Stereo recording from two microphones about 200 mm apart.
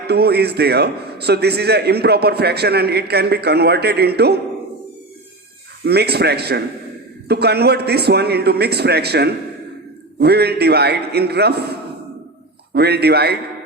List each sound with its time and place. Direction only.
0.1 s a man's voice: 55° right (ahead or behind)
5.8 s a man's voice: 55° right (ahead or behind)